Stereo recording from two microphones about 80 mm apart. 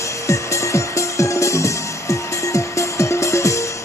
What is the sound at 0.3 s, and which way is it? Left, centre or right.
Music, left.